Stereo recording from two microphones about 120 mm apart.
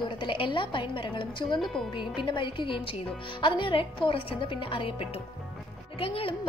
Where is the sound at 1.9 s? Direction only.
40° left (ahead or behind).